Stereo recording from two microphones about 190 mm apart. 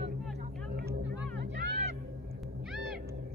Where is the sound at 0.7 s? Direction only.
60° right (ahead or behind).